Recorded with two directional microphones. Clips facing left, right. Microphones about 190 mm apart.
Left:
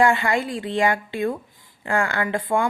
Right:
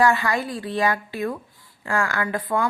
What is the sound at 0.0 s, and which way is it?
A woman's voice, 25° left (ahead or behind).